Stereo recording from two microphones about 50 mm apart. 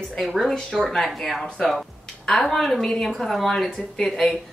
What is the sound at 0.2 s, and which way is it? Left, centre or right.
A woman's voice, centre.